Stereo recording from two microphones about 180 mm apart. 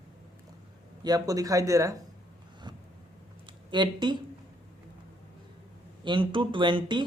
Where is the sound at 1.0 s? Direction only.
20° right (ahead or behind).